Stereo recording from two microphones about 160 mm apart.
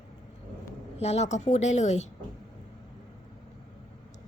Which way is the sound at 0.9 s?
40° left (ahead or behind).